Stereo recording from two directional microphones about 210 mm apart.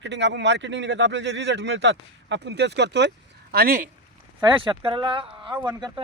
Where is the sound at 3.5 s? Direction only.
45° right (ahead or behind).